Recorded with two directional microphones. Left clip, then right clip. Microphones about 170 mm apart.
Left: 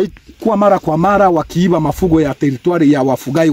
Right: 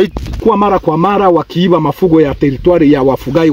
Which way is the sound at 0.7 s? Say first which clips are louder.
Right 1 dB; 15° left (ahead or behind).